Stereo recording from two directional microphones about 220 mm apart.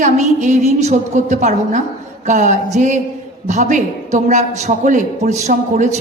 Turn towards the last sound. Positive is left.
turn(degrees=-30)  # may be behind; listen again after turning